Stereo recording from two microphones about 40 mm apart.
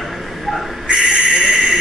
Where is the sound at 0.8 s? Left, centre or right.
Right.